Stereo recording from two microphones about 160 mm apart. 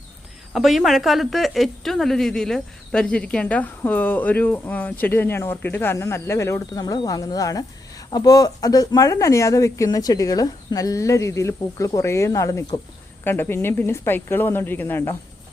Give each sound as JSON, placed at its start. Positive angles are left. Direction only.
{"t": 0.5, "sound": "a woman's voice", "side_deg": 0}